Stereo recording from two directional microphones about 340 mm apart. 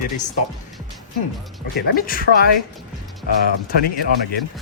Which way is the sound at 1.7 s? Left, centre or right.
Left.